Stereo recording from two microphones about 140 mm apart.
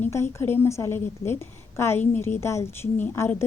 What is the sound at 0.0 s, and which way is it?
A woman's voice, 20° left (ahead or behind).